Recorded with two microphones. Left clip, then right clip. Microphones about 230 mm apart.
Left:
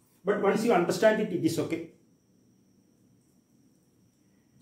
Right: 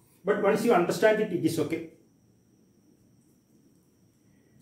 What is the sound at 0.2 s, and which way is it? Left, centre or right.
Speech, centre.